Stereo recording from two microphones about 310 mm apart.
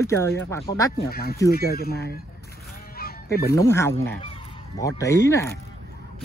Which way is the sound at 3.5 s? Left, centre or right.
Centre.